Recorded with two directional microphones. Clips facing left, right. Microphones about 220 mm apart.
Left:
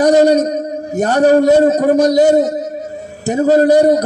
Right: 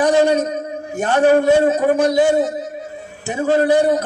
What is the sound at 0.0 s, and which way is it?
A man's voice, 40° left (ahead or behind).